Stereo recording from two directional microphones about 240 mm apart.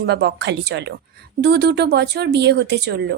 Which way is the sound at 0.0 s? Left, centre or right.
Right.